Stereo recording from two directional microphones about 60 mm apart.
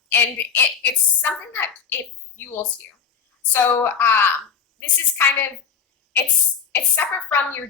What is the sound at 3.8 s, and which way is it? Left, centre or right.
Speech, left.